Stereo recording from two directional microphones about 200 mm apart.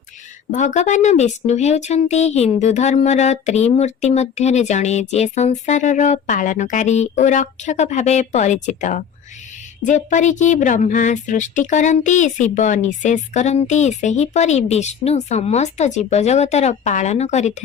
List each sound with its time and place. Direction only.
0.5 s speech: 35° left (ahead or behind)